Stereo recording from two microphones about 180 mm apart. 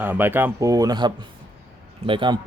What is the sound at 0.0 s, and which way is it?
Speech, 10° right (ahead or behind).